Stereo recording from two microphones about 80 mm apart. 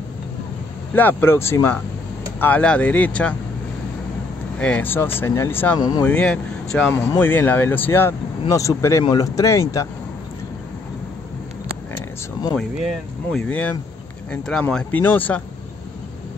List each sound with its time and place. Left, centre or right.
0.9 s speech: left
2.4 s speech: centre
4.6 s speech: centre
4.8 s speech: left
5.8 s speech: left
6.0 s speech: centre
6.9 s speech: left
8.5 s speech: left
13.3 s speech: centre
14.3 s speech: centre
14.9 s speech: left